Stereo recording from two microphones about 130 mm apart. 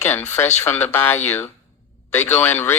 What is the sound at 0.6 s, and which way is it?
Speech, 20° left (ahead or behind).